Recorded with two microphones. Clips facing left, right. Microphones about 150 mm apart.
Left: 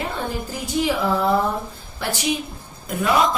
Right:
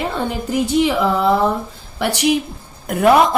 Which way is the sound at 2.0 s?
70° right (ahead or behind).